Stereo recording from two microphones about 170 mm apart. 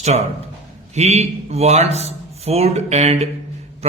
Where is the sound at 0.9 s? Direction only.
40° right (ahead or behind).